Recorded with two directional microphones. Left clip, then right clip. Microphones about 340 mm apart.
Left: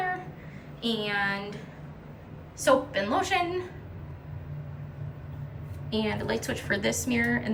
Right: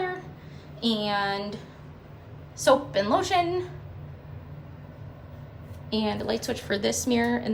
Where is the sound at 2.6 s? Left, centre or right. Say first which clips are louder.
Right 2 dB; centre.